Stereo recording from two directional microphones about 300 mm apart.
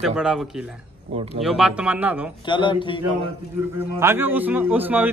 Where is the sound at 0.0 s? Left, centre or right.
Centre.